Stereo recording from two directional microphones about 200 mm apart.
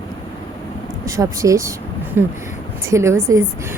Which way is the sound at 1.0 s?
15° right (ahead or behind).